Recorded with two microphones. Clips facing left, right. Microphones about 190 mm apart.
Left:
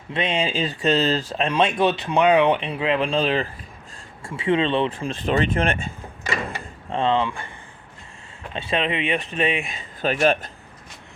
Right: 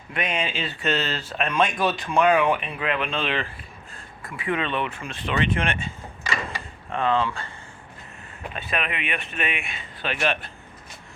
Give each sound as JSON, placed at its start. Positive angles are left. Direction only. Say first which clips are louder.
{"t": 0.1, "sound": "speech", "louder": "left 4 dB", "side_deg": 25}
{"t": 4.3, "sound": "speech", "louder": "left 6 dB", "side_deg": 25}
{"t": 6.9, "sound": "speech", "louder": "left 2 dB", "side_deg": 25}
{"t": 8.7, "sound": "speech", "louder": "left 6 dB", "side_deg": 30}